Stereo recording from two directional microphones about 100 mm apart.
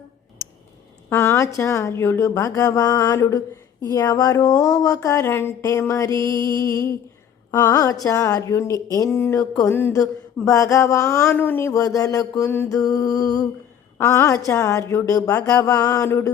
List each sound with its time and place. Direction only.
1.1 s speech: 25° left (ahead or behind)
9.6 s a sound: 25° left (ahead or behind)
10.4 s speech: 35° left (ahead or behind)
11.9 s speech: 35° left (ahead or behind)
14.0 s speech: 30° left (ahead or behind)